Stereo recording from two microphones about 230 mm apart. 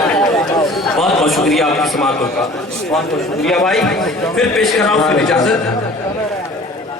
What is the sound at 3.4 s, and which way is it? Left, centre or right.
A man's voice, centre.